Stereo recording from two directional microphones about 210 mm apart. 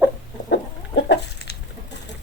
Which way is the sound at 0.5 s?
55° left (ahead or behind).